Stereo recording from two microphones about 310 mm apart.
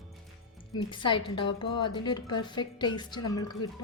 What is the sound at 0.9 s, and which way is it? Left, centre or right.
Speech, centre.